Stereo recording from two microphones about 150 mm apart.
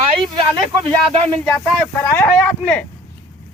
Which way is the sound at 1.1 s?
40° right (ahead or behind).